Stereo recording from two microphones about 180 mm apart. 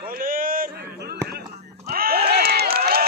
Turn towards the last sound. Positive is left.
turn(degrees=-55)  # may be behind; listen again after turning